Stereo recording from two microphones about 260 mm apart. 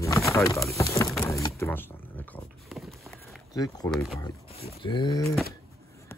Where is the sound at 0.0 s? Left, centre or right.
Centre.